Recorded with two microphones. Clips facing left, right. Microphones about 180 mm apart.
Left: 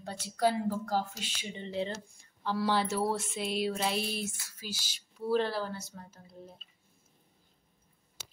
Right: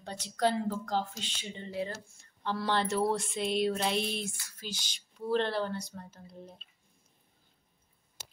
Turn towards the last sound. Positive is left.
turn(degrees=0)  # may be behind; listen again after turning